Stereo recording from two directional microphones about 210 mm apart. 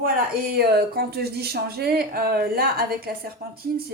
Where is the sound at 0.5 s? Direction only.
45° right (ahead or behind).